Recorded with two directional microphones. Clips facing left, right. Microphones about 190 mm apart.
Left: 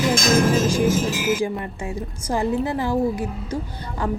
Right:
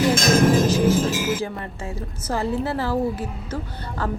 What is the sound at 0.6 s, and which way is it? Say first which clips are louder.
A woman's voice: right 1 dB; 10° left (ahead or behind).